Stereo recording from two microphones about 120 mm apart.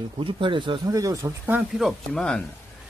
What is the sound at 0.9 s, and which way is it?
Speech, 30° right (ahead or behind).